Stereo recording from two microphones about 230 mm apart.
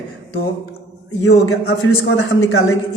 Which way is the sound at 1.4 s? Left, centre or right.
Left.